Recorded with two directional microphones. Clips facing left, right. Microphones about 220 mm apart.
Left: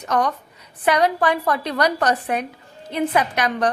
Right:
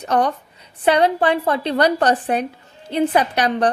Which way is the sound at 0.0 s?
30° right (ahead or behind).